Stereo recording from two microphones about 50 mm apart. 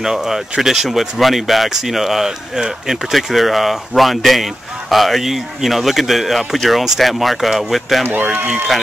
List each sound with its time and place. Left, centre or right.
0.0 s speech: centre